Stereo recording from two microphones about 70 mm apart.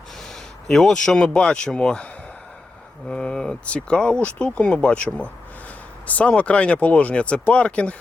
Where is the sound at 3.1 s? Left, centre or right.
Centre.